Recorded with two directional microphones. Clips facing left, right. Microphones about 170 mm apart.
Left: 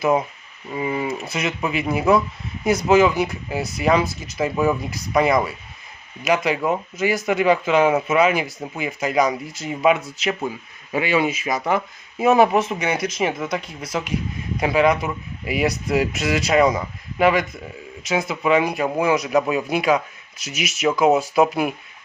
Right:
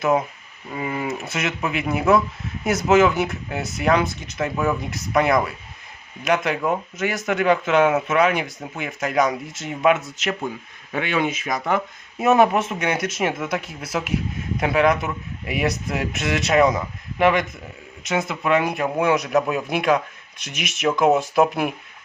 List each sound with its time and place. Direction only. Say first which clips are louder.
0.0 s speech: left 1 dB; centre (ahead or behind)